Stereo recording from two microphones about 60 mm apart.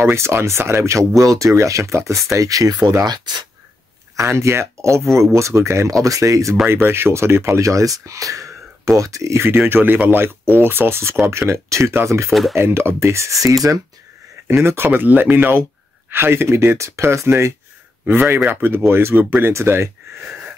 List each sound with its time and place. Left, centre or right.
0.0 s speech: right
4.2 s speech: right
6.0 s speech: right
6.7 s speech: right
12.3 s speech: centre
12.5 s speech: right
14.5 s speech: right
14.9 s speech: right
18.0 s speech: right